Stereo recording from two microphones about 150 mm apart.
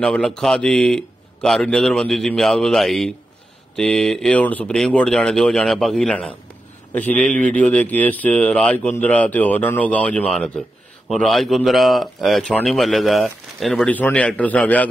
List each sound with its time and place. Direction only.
0.0 s speech: 5° left (ahead or behind)